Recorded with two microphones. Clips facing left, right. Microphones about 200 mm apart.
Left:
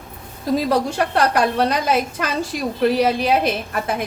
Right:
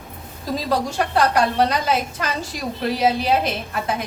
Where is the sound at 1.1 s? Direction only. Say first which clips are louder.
Even; 55° left (ahead or behind).